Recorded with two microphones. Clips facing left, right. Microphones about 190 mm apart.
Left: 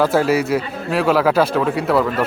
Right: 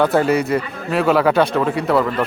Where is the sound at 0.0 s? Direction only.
5° left (ahead or behind).